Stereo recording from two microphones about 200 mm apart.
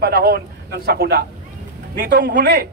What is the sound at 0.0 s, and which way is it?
A man's voice, 50° right (ahead or behind).